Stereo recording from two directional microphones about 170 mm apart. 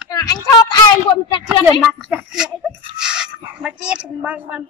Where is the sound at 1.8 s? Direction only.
Centre (ahead or behind).